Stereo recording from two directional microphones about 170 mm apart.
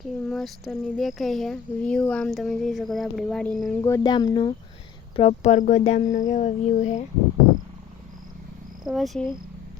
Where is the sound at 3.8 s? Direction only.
20° left (ahead or behind).